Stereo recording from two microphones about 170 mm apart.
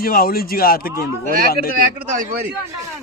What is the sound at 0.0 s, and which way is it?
Speech, 60° left (ahead or behind).